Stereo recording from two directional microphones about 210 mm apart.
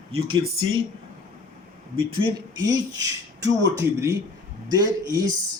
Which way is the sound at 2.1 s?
25° right (ahead or behind).